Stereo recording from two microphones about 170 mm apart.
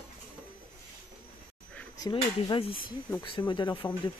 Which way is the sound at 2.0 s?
30° left (ahead or behind).